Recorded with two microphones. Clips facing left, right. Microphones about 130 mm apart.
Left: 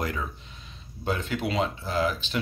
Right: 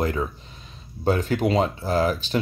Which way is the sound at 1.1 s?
40° right (ahead or behind).